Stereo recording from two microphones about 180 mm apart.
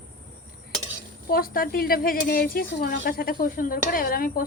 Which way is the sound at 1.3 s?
55° left (ahead or behind).